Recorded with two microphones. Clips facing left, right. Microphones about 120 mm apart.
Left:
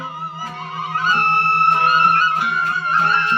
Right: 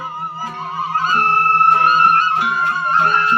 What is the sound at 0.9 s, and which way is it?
Music, 40° right (ahead or behind).